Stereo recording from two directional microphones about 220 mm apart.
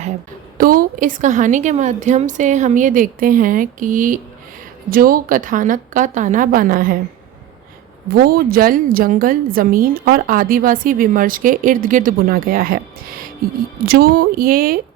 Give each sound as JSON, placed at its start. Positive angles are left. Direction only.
{"t": 0.6, "sound": "a woman's voice", "side_deg": -40}
{"t": 8.1, "sound": "a woman's voice", "side_deg": -45}
{"t": 13.8, "sound": "speech", "side_deg": -45}